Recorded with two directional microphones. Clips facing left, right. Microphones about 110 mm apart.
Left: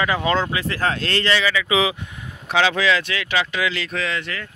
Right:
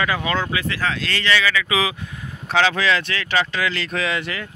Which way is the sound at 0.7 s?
45° left (ahead or behind).